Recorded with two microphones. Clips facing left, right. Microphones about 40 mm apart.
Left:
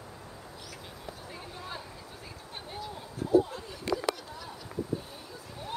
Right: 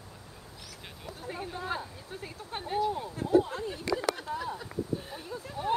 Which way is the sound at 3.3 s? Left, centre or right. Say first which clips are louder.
Even; right.